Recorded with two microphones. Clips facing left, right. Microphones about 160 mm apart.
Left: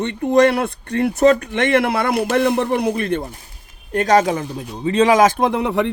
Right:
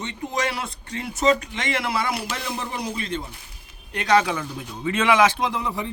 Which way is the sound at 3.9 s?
45° left (ahead or behind).